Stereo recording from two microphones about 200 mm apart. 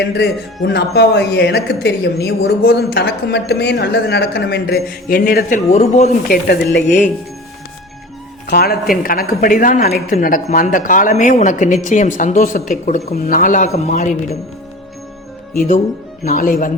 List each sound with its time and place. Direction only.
0.0 s speech: 55° left (ahead or behind)
5.7 s a woman's voice: 35° left (ahead or behind)
6.2 s speech: 50° left (ahead or behind)
8.4 s a woman's voice: 50° left (ahead or behind)
16.2 s speech: 40° left (ahead or behind)